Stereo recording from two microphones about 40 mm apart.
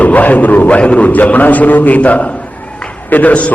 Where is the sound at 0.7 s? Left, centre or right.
Left.